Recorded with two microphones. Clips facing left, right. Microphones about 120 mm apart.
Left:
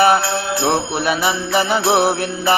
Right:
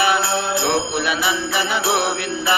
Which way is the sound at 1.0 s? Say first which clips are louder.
Left 3 dB; 40° left (ahead or behind).